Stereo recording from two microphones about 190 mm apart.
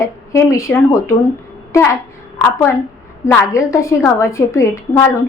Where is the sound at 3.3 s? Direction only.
15° left (ahead or behind).